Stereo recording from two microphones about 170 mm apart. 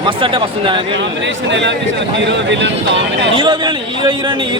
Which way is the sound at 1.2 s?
90° right.